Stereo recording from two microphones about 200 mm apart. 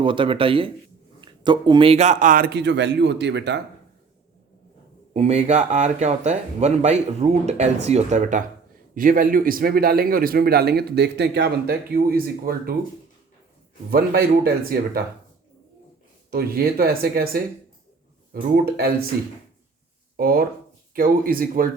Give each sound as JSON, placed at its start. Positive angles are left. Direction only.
{"t": 0.0, "sound": "speech", "side_deg": -25}
{"t": 5.1, "sound": "speech", "side_deg": -35}
{"t": 13.9, "sound": "speech", "side_deg": -50}
{"t": 16.3, "sound": "speech", "side_deg": -50}
{"t": 20.1, "sound": "speech", "side_deg": -45}